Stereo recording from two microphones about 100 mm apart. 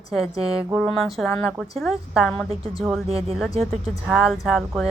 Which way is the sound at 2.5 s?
75° right (ahead or behind).